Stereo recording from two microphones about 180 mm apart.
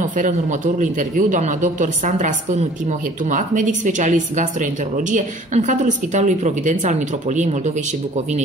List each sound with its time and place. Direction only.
0.2 s a woman's voice: 45° right (ahead or behind)